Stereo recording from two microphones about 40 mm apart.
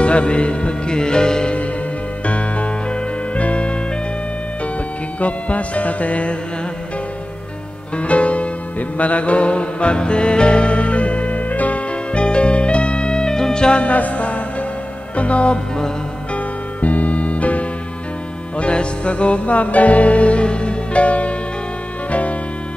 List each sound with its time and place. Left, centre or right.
0.0 s music: left
2.2 s music: left
5.2 s music: left
8.0 s music: left
16.8 s music: left